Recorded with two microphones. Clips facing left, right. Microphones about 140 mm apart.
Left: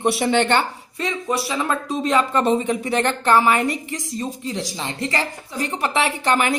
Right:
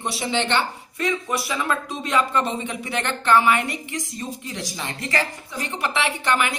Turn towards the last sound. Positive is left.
turn(degrees=35)  # may be behind; listen again after turning